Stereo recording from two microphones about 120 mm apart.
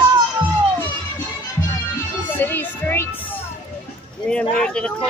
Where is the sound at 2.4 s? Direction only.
15° left (ahead or behind).